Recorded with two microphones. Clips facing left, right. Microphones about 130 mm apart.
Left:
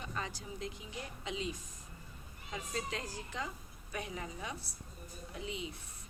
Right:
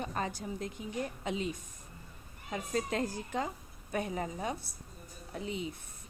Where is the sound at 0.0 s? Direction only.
45° right (ahead or behind).